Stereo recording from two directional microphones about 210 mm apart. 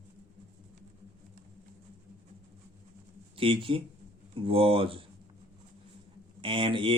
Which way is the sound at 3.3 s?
25° right (ahead or behind).